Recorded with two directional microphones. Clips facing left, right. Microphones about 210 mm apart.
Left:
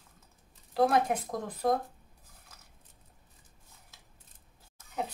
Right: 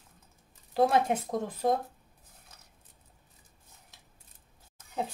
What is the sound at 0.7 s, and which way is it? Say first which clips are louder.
A woman's voice: right 1 dB; 25° right (ahead or behind).